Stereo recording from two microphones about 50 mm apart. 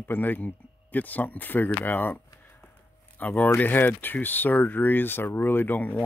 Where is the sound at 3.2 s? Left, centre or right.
Left.